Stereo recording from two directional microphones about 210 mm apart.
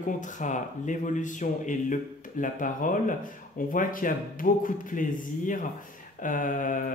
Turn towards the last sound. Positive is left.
turn(degrees=40)  # may be behind; listen again after turning